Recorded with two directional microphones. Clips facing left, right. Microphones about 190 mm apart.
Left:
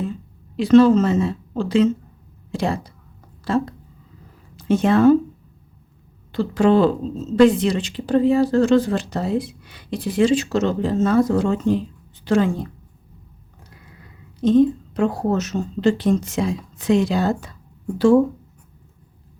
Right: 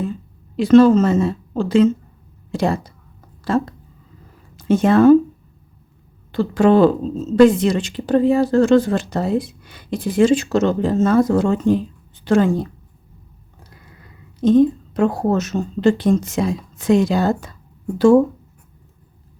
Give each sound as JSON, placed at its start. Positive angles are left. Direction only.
{"t": 0.5, "sound": "speech", "side_deg": -45}
{"t": 6.3, "sound": "a woman's voice", "side_deg": -50}
{"t": 14.4, "sound": "speech", "side_deg": -50}